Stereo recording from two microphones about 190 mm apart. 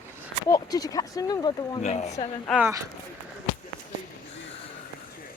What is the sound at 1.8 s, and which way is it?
Speech, 35° left (ahead or behind).